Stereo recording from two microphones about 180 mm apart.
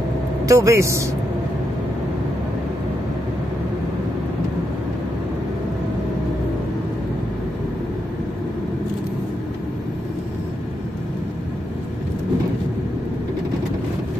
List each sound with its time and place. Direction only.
0.5 s speech: 15° right (ahead or behind)